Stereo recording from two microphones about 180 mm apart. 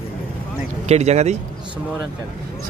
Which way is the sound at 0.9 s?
35° right (ahead or behind).